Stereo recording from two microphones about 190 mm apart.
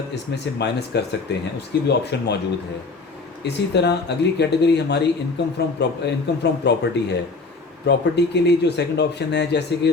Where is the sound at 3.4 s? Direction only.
60° left (ahead or behind).